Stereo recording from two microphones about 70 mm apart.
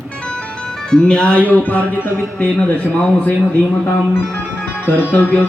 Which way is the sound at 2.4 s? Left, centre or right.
Centre.